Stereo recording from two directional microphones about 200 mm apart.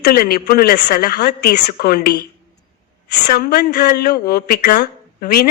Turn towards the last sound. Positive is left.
turn(degrees=50)  # may be behind; listen again after turning